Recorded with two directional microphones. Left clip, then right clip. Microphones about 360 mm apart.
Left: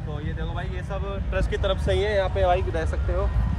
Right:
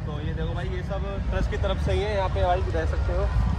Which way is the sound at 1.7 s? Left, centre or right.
Left.